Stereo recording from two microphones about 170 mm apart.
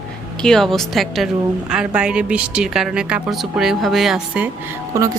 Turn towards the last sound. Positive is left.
turn(degrees=-20)  # may be behind; listen again after turning